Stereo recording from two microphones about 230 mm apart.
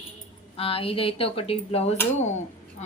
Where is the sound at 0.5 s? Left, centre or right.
Left.